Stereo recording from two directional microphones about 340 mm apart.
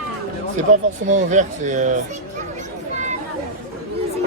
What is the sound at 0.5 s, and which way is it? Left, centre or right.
Speech, right.